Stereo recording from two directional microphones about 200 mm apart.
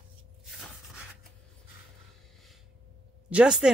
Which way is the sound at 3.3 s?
5° right (ahead or behind).